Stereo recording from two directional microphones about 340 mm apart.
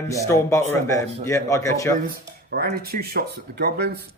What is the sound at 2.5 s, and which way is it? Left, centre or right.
Speech, right.